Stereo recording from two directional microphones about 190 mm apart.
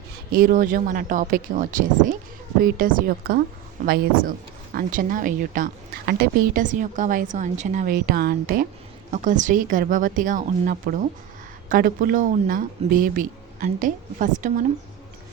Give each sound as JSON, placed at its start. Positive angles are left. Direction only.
{"t": 0.3, "sound": "speech", "side_deg": -45}
{"t": 7.9, "sound": "speech", "side_deg": -55}
{"t": 9.1, "sound": "speech", "side_deg": -40}